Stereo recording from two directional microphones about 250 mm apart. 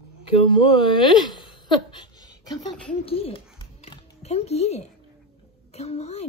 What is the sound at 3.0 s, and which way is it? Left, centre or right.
A child's voice, left.